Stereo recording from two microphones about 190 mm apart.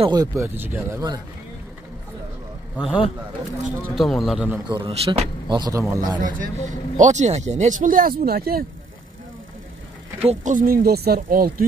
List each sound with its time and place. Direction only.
0.0 s speech: 20° right (ahead or behind)
2.8 s speech: 5° right (ahead or behind)
4.6 s speech: 25° right (ahead or behind)
5.6 s speech: 15° right (ahead or behind)
6.2 s speech: 40° right (ahead or behind)
10.1 s speech: 35° right (ahead or behind)